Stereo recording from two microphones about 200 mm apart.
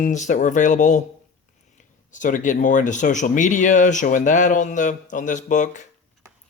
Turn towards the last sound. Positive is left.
turn(degrees=40)  # may be behind; listen again after turning